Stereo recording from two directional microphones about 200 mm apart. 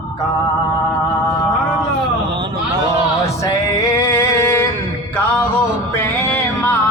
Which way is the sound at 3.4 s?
15° left (ahead or behind).